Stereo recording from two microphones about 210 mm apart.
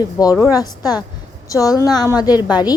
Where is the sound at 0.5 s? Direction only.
15° left (ahead or behind).